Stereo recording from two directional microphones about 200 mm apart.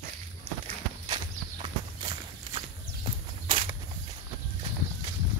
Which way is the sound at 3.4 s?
30° right (ahead or behind).